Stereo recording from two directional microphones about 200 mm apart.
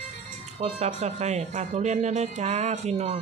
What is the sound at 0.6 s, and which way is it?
Speech, 30° right (ahead or behind).